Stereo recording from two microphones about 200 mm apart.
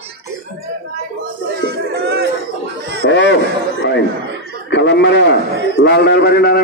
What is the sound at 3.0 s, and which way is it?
Speech, 65° left (ahead or behind).